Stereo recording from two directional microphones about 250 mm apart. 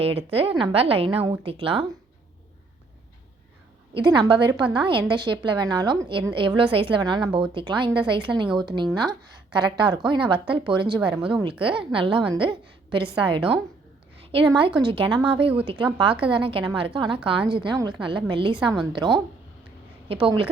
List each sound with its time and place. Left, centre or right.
0.0 s a woman's voice: right
3.9 s a woman's voice: centre
14.8 s a woman's voice: centre
20.1 s a woman's voice: right